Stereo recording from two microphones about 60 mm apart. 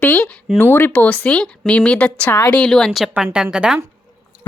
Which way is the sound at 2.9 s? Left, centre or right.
Centre.